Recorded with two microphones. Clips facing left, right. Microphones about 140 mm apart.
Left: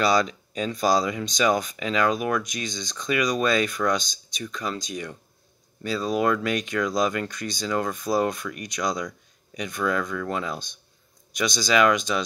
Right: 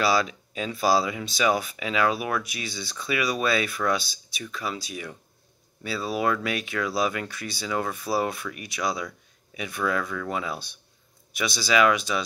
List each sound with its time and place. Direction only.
0.0 s speech: 5° right (ahead or behind)